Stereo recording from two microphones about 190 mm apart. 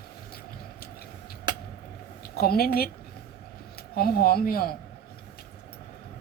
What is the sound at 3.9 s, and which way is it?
Speech, 55° left (ahead or behind).